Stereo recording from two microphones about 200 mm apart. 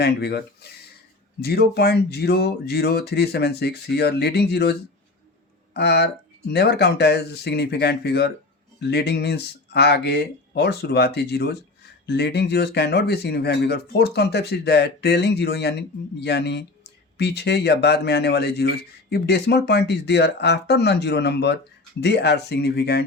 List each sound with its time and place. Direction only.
0.0 s speech: 55° left (ahead or behind)
5.7 s speech: 55° left (ahead or behind)